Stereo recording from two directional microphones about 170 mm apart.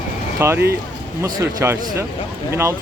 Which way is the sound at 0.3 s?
15° right (ahead or behind).